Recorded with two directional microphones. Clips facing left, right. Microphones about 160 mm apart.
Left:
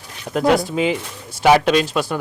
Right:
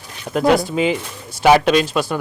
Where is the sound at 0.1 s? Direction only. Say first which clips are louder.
Right 1 dB; 10° right (ahead or behind).